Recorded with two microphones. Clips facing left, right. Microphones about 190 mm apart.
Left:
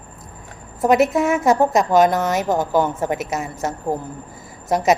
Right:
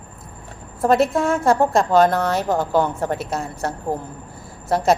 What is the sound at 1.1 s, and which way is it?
Speech, 5° left (ahead or behind).